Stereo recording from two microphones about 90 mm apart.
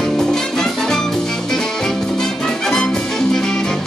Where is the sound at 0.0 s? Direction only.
5° left (ahead or behind).